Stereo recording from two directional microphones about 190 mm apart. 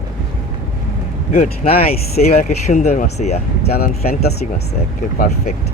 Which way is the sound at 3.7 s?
55° left (ahead or behind).